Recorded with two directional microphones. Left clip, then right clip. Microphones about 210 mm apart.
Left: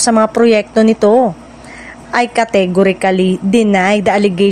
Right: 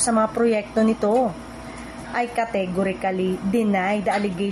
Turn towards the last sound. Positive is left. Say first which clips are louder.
# left 12 dB
turn(degrees=45)  # may be behind; listen again after turning